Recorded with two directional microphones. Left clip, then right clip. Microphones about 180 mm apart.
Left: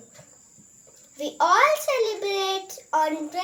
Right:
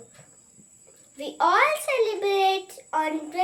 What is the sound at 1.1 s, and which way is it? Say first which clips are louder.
A child's voice: left 1 dB; 15° right (ahead or behind).